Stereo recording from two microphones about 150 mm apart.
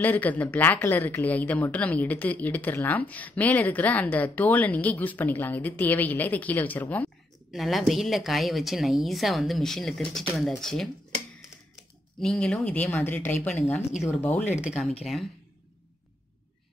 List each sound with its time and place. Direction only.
0.0 s speech: 10° left (ahead or behind)
7.5 s a woman's voice: centre (ahead or behind)
12.2 s speech: 5° left (ahead or behind)
15.0 s a woman's voice: centre (ahead or behind)